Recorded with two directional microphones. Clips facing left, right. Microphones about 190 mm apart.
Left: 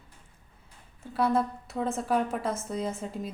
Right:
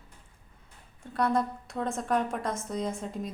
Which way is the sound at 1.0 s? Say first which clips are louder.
Left 1 dB; 5° left (ahead or behind).